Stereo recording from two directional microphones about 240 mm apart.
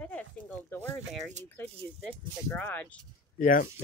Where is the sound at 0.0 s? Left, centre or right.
Centre.